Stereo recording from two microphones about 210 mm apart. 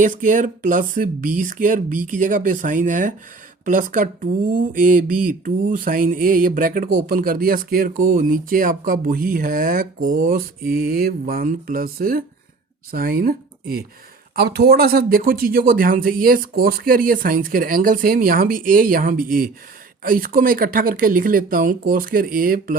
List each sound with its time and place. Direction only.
0.0 s speech: 40° right (ahead or behind)